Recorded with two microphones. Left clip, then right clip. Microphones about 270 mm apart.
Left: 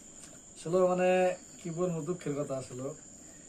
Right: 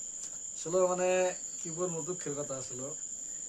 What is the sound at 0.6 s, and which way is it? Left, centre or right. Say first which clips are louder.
Speech: left 2 dB; centre.